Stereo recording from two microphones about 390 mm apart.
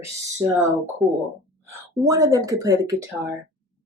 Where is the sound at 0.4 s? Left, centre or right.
Centre.